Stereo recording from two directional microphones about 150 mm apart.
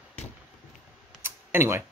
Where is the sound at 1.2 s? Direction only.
15° right (ahead or behind).